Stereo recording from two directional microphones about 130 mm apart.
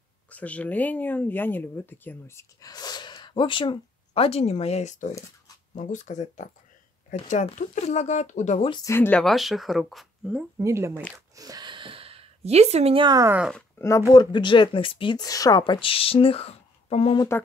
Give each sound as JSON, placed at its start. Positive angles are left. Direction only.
{"t": 0.3, "sound": "speech", "side_deg": 10}
{"t": 7.5, "sound": "speech", "side_deg": 60}
{"t": 8.8, "sound": "speech", "side_deg": 15}
{"t": 9.2, "sound": "speech", "side_deg": 0}
{"t": 10.6, "sound": "speech", "side_deg": -20}
{"t": 11.0, "sound": "speech", "side_deg": 10}
{"t": 11.3, "sound": "a sound", "side_deg": -30}
{"t": 13.0, "sound": "speech", "side_deg": -30}
{"t": 13.7, "sound": "speech", "side_deg": 20}
{"t": 14.3, "sound": "speech", "side_deg": 40}